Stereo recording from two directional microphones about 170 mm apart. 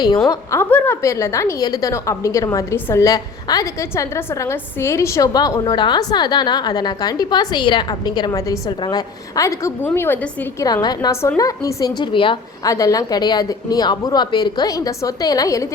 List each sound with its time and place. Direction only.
0.3 s a woman's voice: 15° left (ahead or behind)
10.7 s a woman's voice: 25° left (ahead or behind)